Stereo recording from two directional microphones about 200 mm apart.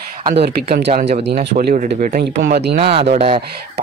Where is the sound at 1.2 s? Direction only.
55° right (ahead or behind).